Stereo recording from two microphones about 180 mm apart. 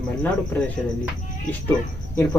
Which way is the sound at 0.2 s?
10° left (ahead or behind).